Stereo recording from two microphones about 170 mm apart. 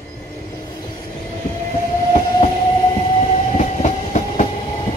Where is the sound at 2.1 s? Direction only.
35° left (ahead or behind).